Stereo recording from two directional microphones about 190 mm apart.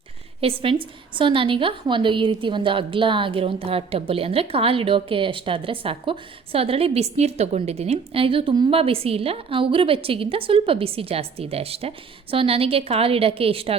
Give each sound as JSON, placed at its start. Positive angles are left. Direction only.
{"t": 0.4, "sound": "a woman's voice", "side_deg": -30}